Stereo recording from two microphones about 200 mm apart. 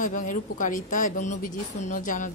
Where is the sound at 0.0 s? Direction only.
40° left (ahead or behind).